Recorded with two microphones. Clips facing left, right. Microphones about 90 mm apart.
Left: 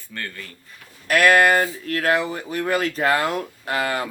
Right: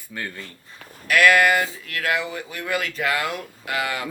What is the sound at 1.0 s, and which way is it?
Speech, 40° left (ahead or behind).